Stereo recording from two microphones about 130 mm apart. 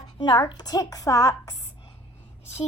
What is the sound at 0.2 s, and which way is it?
Speech, 30° left (ahead or behind).